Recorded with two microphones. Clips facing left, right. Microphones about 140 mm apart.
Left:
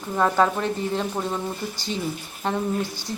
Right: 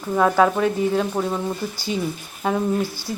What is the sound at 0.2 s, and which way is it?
Speech, 5° right (ahead or behind).